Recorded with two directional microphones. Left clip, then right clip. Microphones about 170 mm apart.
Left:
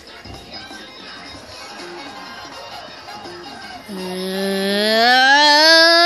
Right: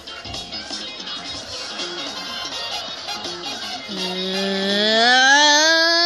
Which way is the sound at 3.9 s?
15° right (ahead or behind).